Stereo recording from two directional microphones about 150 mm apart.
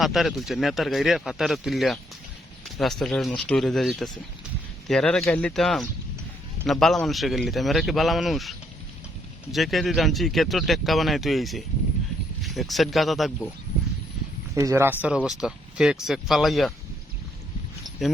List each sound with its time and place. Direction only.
0.0 s speech: centre (ahead or behind)
14.5 s speech: 20° right (ahead or behind)
15.0 s speech: 5° right (ahead or behind)